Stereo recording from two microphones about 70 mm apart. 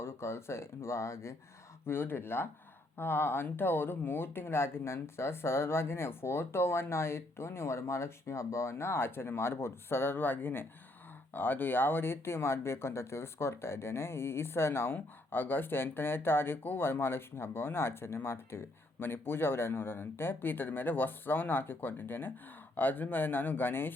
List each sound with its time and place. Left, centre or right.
0.0 s speech: left